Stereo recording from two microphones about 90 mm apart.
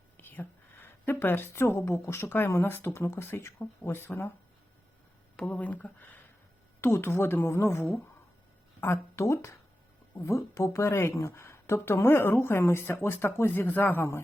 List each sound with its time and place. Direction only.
0.2 s a woman's voice: 25° left (ahead or behind)
5.4 s a woman's voice: 15° left (ahead or behind)